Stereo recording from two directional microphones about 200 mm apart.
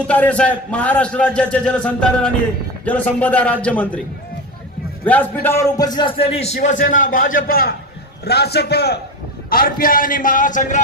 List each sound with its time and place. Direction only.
0.0 s a man's voice: 5° left (ahead or behind)
5.0 s a man's voice: 10° left (ahead or behind); by 10.8 s 40° left (ahead or behind)